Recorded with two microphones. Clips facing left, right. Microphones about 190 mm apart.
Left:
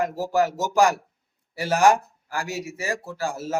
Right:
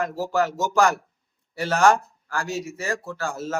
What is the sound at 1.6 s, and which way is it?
Speech, 15° left (ahead or behind).